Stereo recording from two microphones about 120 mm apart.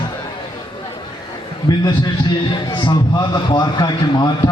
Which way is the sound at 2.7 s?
40° left (ahead or behind).